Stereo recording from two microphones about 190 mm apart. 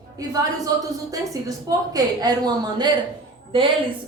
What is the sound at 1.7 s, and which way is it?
A woman's voice, 20° right (ahead or behind).